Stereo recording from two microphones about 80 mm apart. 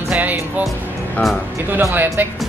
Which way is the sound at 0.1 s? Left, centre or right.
Centre.